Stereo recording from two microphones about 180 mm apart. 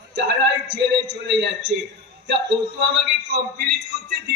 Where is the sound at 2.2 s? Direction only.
70° right (ahead or behind).